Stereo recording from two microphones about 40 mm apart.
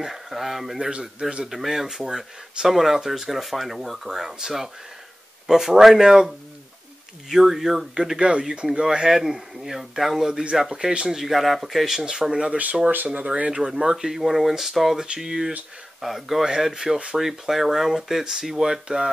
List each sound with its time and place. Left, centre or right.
0.0 s speech: centre
8.2 s speech: centre
12.1 s speech: centre
12.4 s speech: right
13.1 s speech: right; by 16.4 s centre
16.4 s speech: centre
17.2 s speech: centre